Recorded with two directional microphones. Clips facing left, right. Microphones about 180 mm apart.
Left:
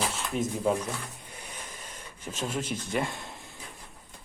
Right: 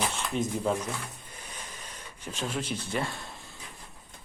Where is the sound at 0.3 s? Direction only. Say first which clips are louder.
Left 2 dB; 5° left (ahead or behind).